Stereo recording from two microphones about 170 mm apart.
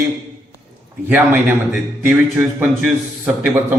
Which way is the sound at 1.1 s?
10° right (ahead or behind).